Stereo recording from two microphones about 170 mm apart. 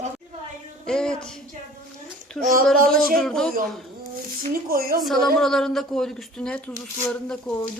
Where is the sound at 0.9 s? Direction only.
5° left (ahead or behind).